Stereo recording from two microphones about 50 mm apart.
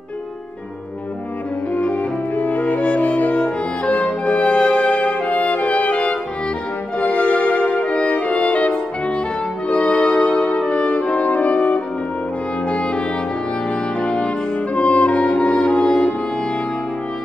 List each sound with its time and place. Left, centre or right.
1.8 s music: left
14.0 s music: left